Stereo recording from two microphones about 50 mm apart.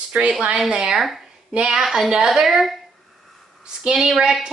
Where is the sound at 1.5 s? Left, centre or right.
Centre.